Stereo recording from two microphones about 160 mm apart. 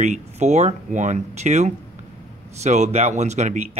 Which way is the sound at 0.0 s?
45° right (ahead or behind).